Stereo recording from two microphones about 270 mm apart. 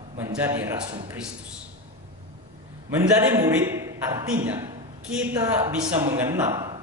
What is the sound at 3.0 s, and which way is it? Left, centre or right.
A man's voice, centre.